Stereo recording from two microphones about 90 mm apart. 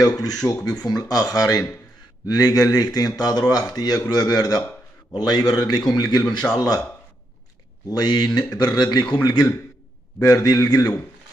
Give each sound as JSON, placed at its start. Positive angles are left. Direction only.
{"t": 0.2, "sound": "speech", "side_deg": 45}
{"t": 7.9, "sound": "a man's voice", "side_deg": 50}